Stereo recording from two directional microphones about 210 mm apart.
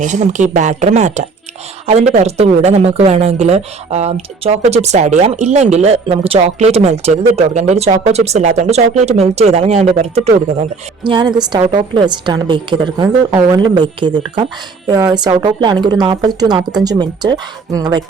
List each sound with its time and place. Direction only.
0.0 s a woman's voice: 35° right (ahead or behind); by 18.0 s 20° right (ahead or behind)